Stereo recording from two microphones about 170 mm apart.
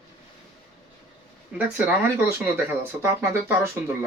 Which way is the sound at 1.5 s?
10° right (ahead or behind).